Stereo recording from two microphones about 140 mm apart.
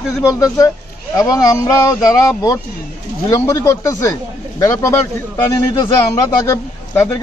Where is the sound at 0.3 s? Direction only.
25° left (ahead or behind).